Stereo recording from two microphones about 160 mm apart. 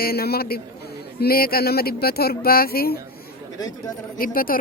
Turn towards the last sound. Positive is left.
turn(degrees=65)  # may be behind; listen again after turning